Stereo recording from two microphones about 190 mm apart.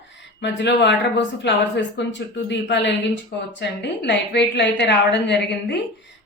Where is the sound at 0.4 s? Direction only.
65° left (ahead or behind).